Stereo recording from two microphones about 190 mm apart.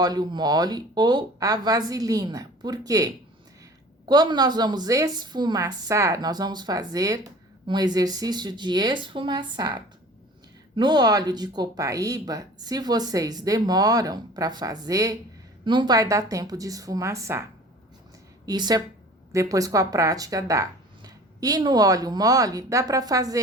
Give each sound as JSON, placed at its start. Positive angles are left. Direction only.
{"t": 0.0, "sound": "speech", "side_deg": -20}
{"t": 18.4, "sound": "speech", "side_deg": -20}